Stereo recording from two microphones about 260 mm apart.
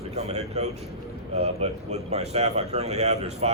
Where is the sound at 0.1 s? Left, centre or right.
Right.